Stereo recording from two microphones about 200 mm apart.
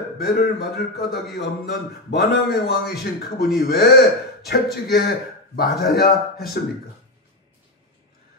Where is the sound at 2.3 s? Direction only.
50° left (ahead or behind).